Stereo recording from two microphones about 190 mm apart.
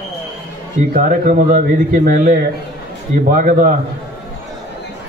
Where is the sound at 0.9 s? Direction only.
40° right (ahead or behind).